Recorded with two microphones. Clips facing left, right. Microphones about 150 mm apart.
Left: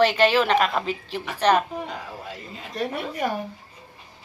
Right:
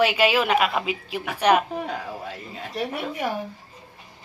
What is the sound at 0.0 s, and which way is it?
A woman's voice, 10° right (ahead or behind).